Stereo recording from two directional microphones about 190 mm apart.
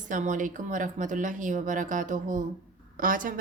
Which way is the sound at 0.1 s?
40° right (ahead or behind).